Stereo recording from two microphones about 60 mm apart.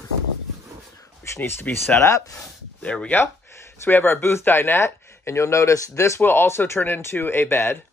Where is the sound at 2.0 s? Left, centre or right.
Left.